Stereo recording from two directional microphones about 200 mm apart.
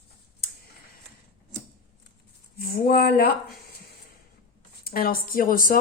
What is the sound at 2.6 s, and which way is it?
Speech, 50° left (ahead or behind).